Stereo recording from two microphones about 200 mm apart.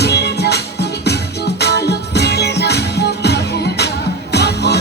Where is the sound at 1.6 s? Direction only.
55° left (ahead or behind).